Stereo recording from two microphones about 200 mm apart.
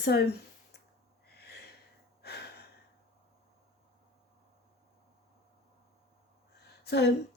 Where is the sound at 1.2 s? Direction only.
55° left (ahead or behind).